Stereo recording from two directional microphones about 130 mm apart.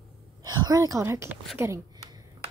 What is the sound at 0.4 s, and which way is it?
Speech, 30° right (ahead or behind).